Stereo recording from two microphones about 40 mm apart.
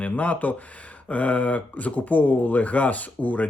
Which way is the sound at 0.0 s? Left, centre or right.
Left.